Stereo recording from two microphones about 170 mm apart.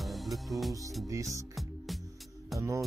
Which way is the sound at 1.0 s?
20° right (ahead or behind).